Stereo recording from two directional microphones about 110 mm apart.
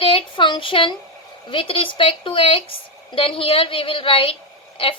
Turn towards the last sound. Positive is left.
turn(degrees=55)  # may be behind; listen again after turning